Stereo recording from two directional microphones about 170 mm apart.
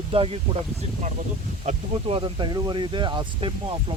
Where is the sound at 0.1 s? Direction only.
35° right (ahead or behind).